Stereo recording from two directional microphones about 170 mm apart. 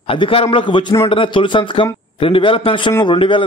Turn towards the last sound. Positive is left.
turn(degrees=30)  # may be behind; listen again after turning